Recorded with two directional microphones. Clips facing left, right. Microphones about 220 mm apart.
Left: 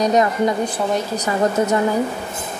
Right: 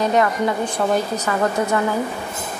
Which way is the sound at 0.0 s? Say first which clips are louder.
Left 2 dB; 20° left (ahead or behind).